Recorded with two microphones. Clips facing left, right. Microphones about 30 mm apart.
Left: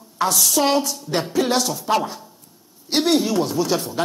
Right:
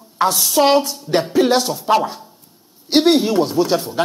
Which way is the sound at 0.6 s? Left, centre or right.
Right.